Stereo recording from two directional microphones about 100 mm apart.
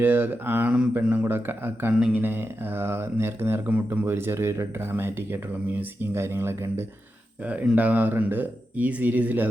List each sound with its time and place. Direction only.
0.0 s speech: 20° right (ahead or behind)
7.4 s speech: 15° right (ahead or behind)